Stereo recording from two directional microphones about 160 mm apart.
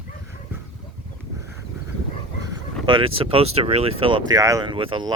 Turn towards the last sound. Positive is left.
turn(degrees=-30)  # may be behind; listen again after turning